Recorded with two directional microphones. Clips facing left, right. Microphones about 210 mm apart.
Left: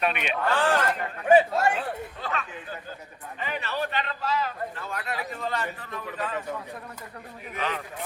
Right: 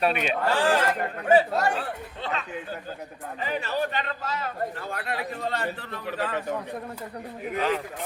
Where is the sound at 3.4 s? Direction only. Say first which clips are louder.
Right 3 dB; 40° right (ahead or behind).